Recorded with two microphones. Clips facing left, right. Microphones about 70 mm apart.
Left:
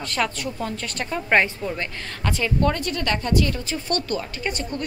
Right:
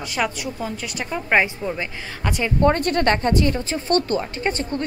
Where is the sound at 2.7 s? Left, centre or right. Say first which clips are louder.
Right 6 dB; right.